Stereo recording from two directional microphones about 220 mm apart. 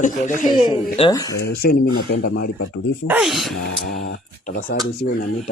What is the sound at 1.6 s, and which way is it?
Speech, 45° left (ahead or behind).